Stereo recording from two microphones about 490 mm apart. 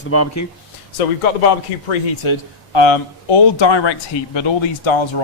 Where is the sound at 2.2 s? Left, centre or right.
Left.